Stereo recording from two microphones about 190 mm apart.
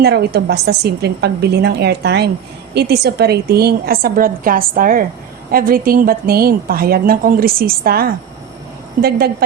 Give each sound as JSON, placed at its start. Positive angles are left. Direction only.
{"t": 0.0, "sound": "a woman's voice", "side_deg": -60}